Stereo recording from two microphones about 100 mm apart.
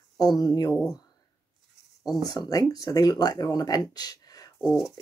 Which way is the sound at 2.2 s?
40° left (ahead or behind).